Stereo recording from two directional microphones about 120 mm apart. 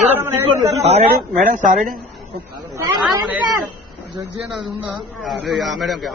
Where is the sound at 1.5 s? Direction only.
90° right.